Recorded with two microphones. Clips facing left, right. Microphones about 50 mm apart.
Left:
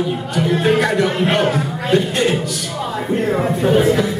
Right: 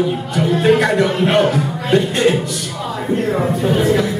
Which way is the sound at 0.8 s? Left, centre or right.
Centre.